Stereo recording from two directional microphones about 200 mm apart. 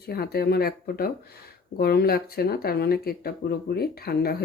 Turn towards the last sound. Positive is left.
turn(degrees=50)  # may be behind; listen again after turning